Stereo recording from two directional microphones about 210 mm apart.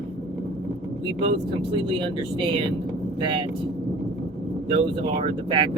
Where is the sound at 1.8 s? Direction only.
25° right (ahead or behind).